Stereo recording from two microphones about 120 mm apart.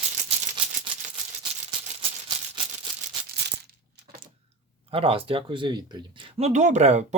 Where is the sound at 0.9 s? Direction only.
40° right (ahead or behind).